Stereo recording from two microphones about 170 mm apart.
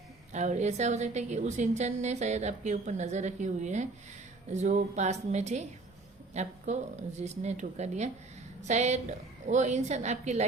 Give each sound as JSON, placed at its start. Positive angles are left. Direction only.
{"t": 0.3, "sound": "a woman's voice", "side_deg": -45}